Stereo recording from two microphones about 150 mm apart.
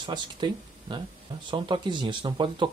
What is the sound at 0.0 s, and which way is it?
Speech, 30° right (ahead or behind).